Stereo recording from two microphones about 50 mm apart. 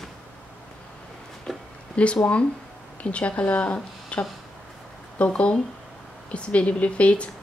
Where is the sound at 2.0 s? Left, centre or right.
Left.